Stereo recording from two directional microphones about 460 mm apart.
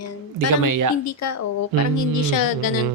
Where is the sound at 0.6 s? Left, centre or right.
Right.